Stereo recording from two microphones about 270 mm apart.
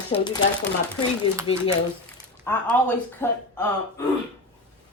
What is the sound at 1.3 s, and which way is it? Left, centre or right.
Speech, centre.